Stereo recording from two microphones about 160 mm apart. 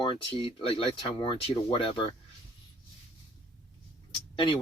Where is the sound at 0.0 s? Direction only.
30° left (ahead or behind).